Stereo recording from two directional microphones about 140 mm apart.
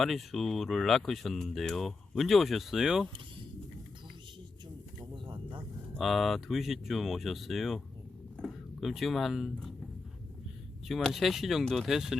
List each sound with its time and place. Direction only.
0.0 s speech: centre (ahead or behind)
5.1 s a sound: 35° right (ahead or behind)
6.0 s speech: centre (ahead or behind)
10.8 s speech: centre (ahead or behind)